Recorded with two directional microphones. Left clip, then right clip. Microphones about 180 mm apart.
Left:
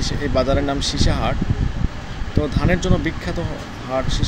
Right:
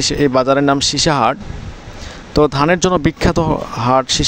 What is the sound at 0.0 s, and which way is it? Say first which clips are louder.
Speech: right 7 dB; 65° right (ahead or behind).